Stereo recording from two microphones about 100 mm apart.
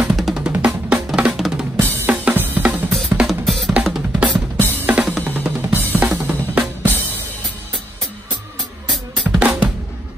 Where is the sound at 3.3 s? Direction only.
Centre (ahead or behind).